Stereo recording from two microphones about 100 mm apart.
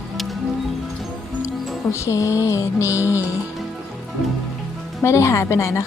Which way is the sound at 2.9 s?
20° right (ahead or behind).